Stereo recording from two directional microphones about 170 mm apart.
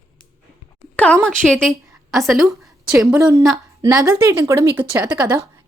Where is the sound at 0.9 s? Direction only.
10° left (ahead or behind).